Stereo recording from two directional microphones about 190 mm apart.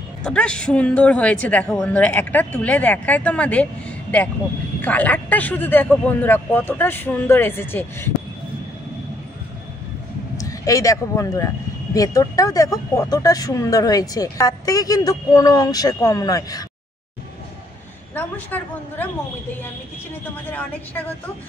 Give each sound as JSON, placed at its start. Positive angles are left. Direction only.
{"t": 0.2, "sound": "speech", "side_deg": 5}
{"t": 4.8, "sound": "speech", "side_deg": 10}
{"t": 10.3, "sound": "speech", "side_deg": 15}
{"t": 18.1, "sound": "speech", "side_deg": 10}